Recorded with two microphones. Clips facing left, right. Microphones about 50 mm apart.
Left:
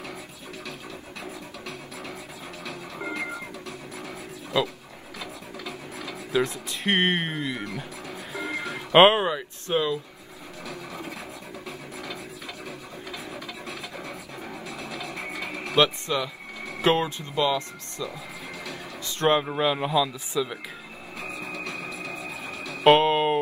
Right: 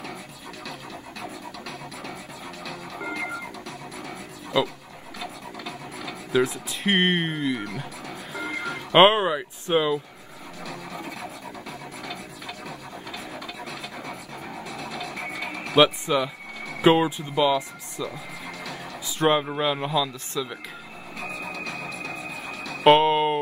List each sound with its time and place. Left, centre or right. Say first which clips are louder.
1.2 s music: right 1 dB; centre
5.9 s a sound: right 2 dB; centre
9.4 s a sound: right 3 dB; centre
10.6 s music: right 1 dB; centre
13.7 s music: right 1 dB; centre
15.7 s speech: right 3 dB; centre
21.2 s music: right 1 dB; centre